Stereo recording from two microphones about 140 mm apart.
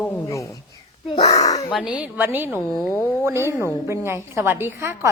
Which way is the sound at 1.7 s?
5° right (ahead or behind).